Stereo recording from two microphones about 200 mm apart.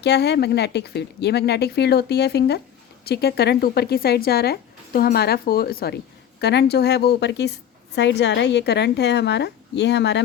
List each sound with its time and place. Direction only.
0.0 s speech: 55° left (ahead or behind)